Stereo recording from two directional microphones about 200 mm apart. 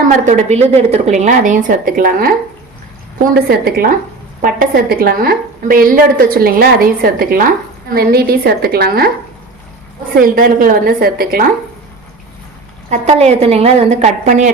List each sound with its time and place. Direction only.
0.3 s a woman's voice: 35° right (ahead or behind)
3.5 s a woman's voice: 50° right (ahead or behind)
10.2 s a woman's voice: 45° right (ahead or behind)
12.9 s a woman's voice: 35° right (ahead or behind)